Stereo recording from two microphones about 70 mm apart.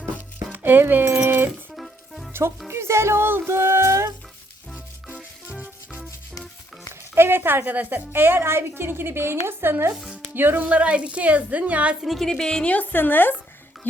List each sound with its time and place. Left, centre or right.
0.5 s a woman's voice: right
1.7 s music: centre
2.6 s a woman's voice: right
5.1 s music: centre
7.2 s a woman's voice: right
12.0 s music: centre
12.7 s speech: left